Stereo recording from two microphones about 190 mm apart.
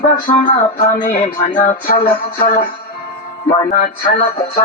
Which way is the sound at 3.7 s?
45° left (ahead or behind).